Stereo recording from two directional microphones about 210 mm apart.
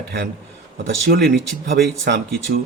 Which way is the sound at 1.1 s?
50° right (ahead or behind).